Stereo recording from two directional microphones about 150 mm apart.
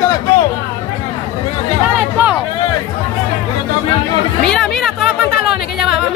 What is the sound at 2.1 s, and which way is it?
Speech, 10° right (ahead or behind).